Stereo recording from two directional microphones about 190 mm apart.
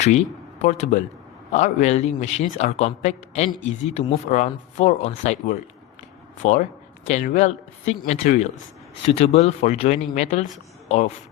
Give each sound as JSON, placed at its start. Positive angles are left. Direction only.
{"t": 0.0, "sound": "a man's voice", "side_deg": 35}